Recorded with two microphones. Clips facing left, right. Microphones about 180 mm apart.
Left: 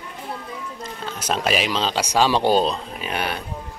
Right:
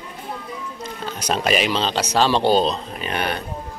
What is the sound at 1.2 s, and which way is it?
Speech, centre (ahead or behind).